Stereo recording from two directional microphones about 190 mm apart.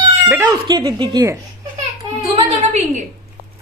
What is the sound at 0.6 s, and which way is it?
Speech, 20° right (ahead or behind).